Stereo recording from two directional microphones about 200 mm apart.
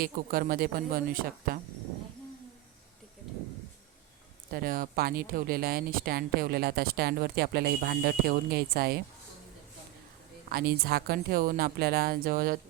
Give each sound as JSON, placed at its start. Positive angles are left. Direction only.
{"t": 0.0, "sound": "speech", "side_deg": -45}
{"t": 4.5, "sound": "speech", "side_deg": -45}
{"t": 10.5, "sound": "speech", "side_deg": -50}